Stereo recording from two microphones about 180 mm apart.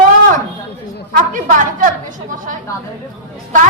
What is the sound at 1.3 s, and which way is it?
Speech, 45° right (ahead or behind).